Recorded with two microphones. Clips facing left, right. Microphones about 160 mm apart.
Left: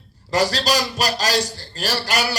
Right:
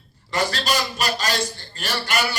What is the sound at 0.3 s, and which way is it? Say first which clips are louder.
A man's voice: left 4 dB; 35° left (ahead or behind).